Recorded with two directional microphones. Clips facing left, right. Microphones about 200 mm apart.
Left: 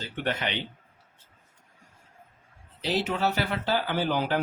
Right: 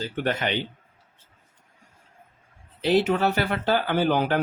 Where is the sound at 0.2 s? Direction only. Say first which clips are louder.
Right 3 dB; 45° right (ahead or behind).